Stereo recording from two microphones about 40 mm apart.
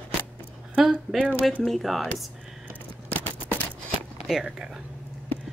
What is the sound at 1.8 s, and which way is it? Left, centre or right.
Speech, centre.